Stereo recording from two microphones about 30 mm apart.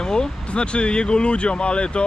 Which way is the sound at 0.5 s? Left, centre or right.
Left.